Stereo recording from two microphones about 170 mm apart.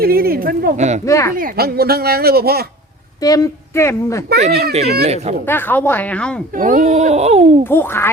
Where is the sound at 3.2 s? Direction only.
20° left (ahead or behind).